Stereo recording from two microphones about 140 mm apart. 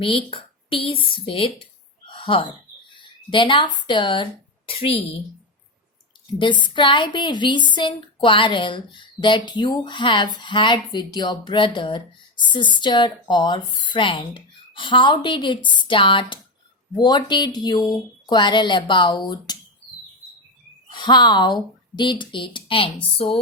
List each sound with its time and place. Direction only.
0.0 s a woman's voice: 40° left (ahead or behind)
2.0 s a sound: 35° left (ahead or behind)
3.2 s speech: 35° left (ahead or behind)
6.4 s a woman's voice: 35° left (ahead or behind)
20.9 s speech: 30° left (ahead or behind)
23.1 s a sound: 45° left (ahead or behind)